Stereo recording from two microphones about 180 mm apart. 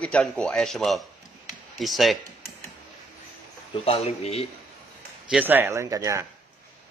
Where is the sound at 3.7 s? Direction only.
30° left (ahead or behind).